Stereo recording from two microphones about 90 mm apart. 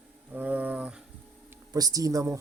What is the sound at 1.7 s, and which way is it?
Speech, 45° right (ahead or behind).